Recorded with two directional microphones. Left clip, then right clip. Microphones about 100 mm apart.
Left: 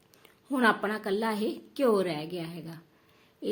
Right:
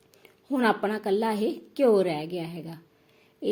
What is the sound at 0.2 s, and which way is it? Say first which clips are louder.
A woman's voice: right 1 dB; 20° right (ahead or behind).